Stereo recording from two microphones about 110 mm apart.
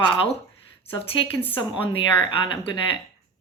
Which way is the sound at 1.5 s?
55° left (ahead or behind).